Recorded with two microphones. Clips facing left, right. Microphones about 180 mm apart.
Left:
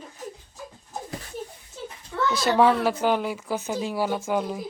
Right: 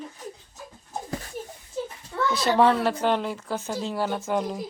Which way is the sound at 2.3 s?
Centre (ahead or behind).